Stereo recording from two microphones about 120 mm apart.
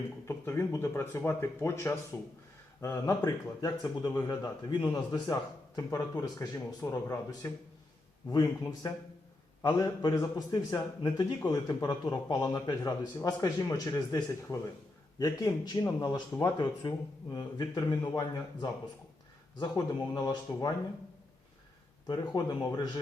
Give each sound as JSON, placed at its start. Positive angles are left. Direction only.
{"t": 0.3, "sound": "speech", "side_deg": 20}
{"t": 3.2, "sound": "a man's voice", "side_deg": 35}
{"t": 17.3, "sound": "a man's voice", "side_deg": 35}
{"t": 22.0, "sound": "a man's voice", "side_deg": 40}